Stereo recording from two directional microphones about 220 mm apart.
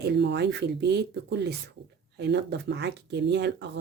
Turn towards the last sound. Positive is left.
turn(degrees=-50)  # may be behind; listen again after turning